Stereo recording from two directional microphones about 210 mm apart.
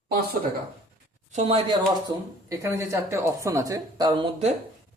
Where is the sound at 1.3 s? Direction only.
30° right (ahead or behind).